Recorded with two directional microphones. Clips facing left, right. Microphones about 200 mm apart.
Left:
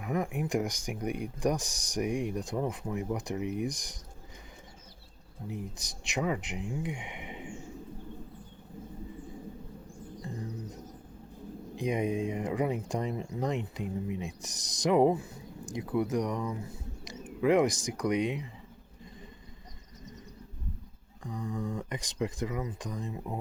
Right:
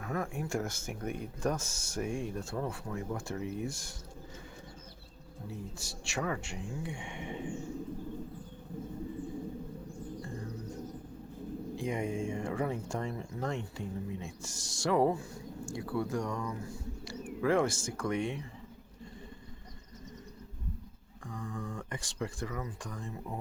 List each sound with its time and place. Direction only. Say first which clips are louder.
0.0 s speech: left 4 dB; 15° left (ahead or behind)
5.5 s speech: left 4 dB; 15° left (ahead or behind)
10.2 s music: left 2 dB; 20° left (ahead or behind)
11.8 s speech: left 5 dB; 20° left (ahead or behind)
21.2 s speech: left 5 dB; 20° left (ahead or behind)